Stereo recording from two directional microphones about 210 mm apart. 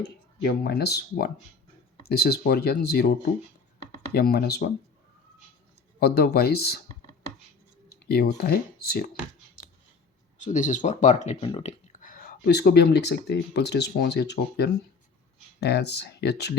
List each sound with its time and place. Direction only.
0.0 s speech: 50° left (ahead or behind)
4.1 s speech: 50° left (ahead or behind)
6.0 s speech: 50° left (ahead or behind)
8.0 s speech: 50° left (ahead or behind)
10.3 s speech: 35° left (ahead or behind); by 16.6 s 50° left (ahead or behind)